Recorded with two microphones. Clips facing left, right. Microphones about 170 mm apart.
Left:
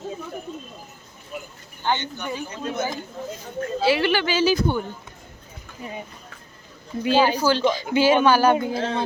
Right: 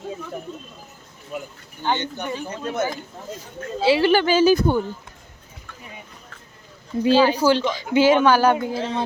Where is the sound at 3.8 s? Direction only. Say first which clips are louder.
Right 3 dB; 30° right (ahead or behind).